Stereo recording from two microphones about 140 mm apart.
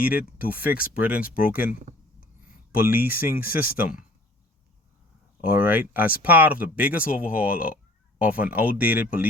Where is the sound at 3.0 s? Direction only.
90° left.